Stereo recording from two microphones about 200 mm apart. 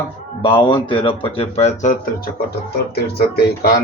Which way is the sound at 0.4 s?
25° left (ahead or behind).